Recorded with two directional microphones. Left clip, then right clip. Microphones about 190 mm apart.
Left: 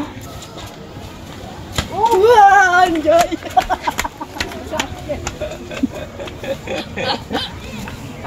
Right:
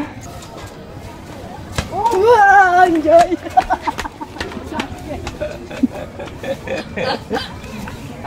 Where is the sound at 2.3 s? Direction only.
10° left (ahead or behind).